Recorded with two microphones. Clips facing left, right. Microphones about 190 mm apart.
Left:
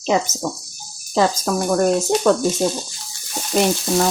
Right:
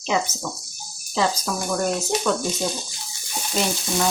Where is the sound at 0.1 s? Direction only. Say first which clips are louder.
Left 4 dB; 45° left (ahead or behind).